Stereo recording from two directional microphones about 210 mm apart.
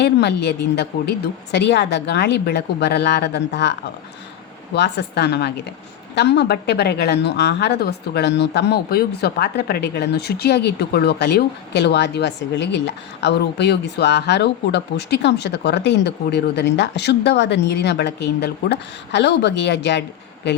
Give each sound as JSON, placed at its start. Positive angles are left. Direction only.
{"t": 0.0, "sound": "speech", "side_deg": 55}